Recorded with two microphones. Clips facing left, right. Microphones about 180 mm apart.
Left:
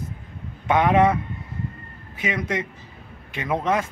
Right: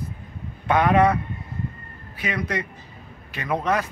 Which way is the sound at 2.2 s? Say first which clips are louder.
Left 1 dB; 20° left (ahead or behind).